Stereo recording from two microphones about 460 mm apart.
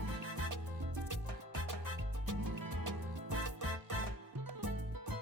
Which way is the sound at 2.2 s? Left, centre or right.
Right.